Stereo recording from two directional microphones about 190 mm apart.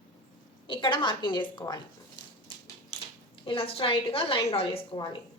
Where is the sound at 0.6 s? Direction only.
25° left (ahead or behind).